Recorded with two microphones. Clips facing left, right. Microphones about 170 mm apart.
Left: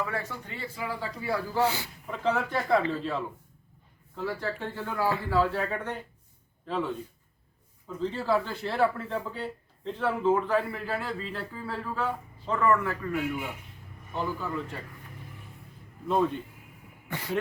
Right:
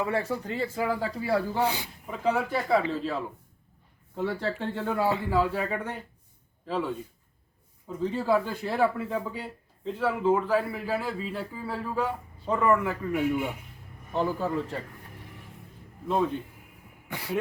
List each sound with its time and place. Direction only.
0.0 s speech: 30° right (ahead or behind)
1.5 s speech: 15° right (ahead or behind)
4.1 s a man's voice: 25° right (ahead or behind); by 6.9 s 5° right (ahead or behind)
7.9 s speech: 15° right (ahead or behind)
14.1 s speech: 35° right (ahead or behind)
17.1 s speech: 10° right (ahead or behind)